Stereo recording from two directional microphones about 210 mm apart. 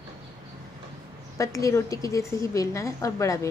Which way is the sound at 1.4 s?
15° left (ahead or behind).